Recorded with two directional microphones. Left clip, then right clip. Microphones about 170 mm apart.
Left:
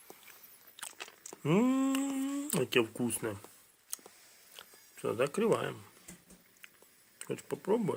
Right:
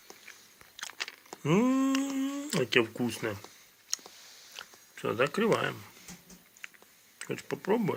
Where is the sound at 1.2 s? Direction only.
15° left (ahead or behind).